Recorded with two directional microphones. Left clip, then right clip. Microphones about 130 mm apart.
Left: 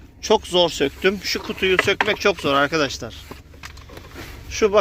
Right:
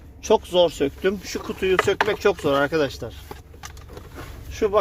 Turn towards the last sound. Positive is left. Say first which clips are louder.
# left 4 dB
turn(degrees=-5)  # may be behind; listen again after turning